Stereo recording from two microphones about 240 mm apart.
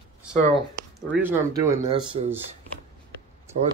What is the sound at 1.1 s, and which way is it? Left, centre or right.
Speech, centre.